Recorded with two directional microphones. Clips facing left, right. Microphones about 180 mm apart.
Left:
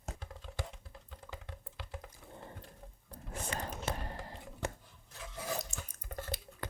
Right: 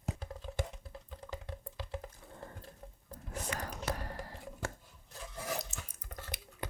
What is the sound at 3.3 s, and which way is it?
Whispering, 30° left (ahead or behind).